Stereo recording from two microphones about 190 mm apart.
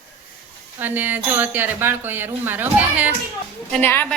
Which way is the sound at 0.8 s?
10° right (ahead or behind).